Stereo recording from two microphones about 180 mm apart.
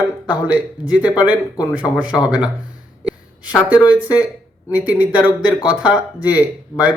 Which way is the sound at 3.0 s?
5° right (ahead or behind).